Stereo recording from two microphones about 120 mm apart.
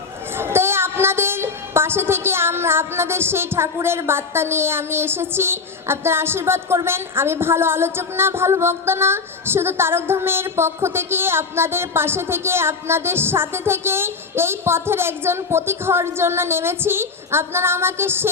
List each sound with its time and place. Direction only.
0.3 s a woman's voice: 20° right (ahead or behind)